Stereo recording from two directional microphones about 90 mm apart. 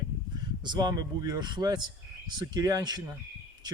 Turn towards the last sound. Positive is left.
turn(degrees=-45)  # may be behind; listen again after turning